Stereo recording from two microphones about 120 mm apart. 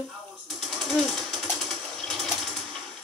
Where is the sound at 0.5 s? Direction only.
5° left (ahead or behind).